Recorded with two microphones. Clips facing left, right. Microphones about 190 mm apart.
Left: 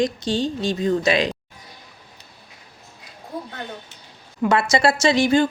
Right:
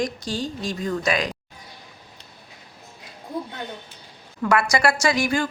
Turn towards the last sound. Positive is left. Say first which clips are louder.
# left 5 dB
turn(degrees=25)  # may be behind; listen again after turning